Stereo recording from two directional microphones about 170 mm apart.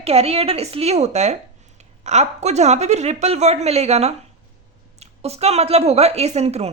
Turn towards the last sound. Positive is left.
turn(degrees=-40)  # may be behind; listen again after turning